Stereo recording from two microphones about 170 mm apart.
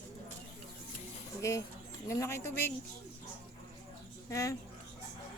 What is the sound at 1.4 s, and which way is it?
Speech, 20° left (ahead or behind).